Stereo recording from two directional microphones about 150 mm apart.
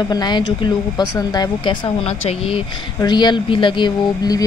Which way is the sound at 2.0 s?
40° left (ahead or behind).